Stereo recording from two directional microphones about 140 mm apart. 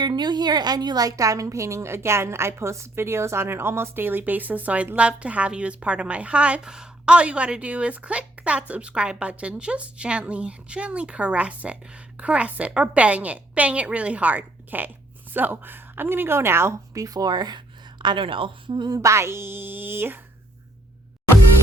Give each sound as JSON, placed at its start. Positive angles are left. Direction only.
{"t": 0.0, "sound": "a woman's voice", "side_deg": -30}